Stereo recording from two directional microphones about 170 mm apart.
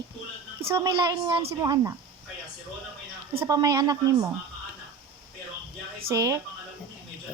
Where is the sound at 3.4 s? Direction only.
20° right (ahead or behind).